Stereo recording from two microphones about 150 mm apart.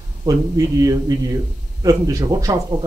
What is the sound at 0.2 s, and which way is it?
A man's voice, 25° right (ahead or behind).